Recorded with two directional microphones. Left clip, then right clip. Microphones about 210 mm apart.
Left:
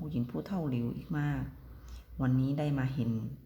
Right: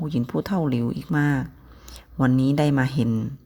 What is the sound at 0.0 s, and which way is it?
Speech, 45° right (ahead or behind).